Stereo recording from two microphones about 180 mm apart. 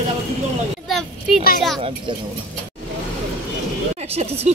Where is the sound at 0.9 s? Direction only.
Centre (ahead or behind).